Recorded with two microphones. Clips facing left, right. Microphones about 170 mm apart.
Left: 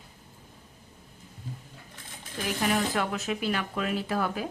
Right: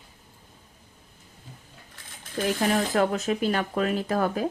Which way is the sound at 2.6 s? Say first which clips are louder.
Right 3 dB; 40° right (ahead or behind).